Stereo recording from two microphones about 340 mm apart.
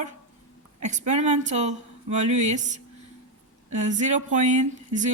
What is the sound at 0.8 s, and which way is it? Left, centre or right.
Speech, right.